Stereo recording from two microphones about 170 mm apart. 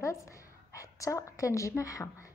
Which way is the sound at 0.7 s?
20° left (ahead or behind).